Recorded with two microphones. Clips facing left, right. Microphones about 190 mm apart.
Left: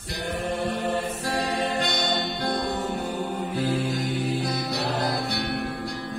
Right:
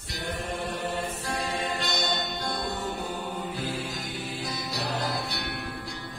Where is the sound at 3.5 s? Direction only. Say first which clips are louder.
Left 8 dB; 55° left (ahead or behind).